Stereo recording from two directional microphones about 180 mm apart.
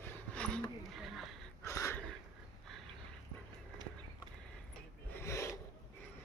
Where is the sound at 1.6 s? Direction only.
15° left (ahead or behind).